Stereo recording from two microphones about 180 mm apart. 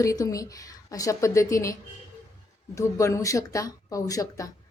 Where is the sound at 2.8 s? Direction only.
15° left (ahead or behind).